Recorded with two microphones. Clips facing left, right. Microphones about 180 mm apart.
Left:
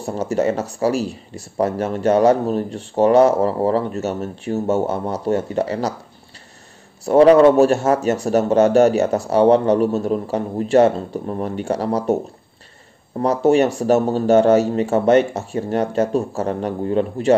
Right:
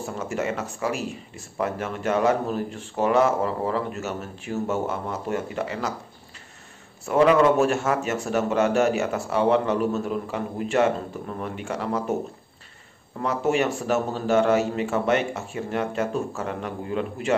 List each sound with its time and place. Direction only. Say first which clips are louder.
0.0 s speech: left 8 dB; 35° left (ahead or behind)
7.1 s speech: left 7 dB; 35° left (ahead or behind)